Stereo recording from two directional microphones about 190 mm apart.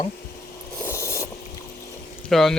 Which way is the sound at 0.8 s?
15° left (ahead or behind).